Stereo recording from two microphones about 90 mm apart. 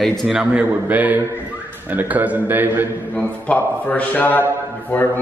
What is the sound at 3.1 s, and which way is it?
A man's voice, 15° left (ahead or behind).